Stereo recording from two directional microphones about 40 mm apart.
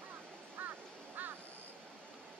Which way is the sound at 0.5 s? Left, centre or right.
Right.